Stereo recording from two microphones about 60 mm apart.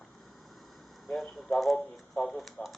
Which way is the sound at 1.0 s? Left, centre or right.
Centre.